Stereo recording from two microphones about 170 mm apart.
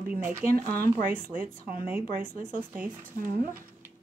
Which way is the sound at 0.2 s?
15° right (ahead or behind).